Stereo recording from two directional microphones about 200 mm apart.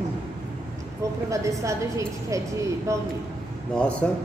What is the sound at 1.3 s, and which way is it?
A woman's voice, 15° right (ahead or behind).